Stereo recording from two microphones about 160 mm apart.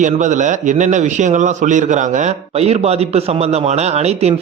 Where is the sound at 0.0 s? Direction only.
50° right (ahead or behind).